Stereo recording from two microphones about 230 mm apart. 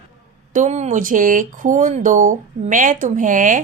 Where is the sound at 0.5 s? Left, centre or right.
Right.